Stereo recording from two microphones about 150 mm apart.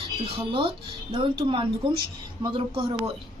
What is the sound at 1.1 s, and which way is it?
A woman's voice, 35° right (ahead or behind).